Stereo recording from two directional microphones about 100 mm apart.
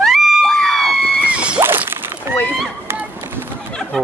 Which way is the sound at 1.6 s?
20° right (ahead or behind).